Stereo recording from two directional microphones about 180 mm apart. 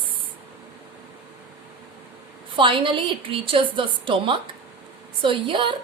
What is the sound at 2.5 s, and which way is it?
A woman's voice, 30° right (ahead or behind).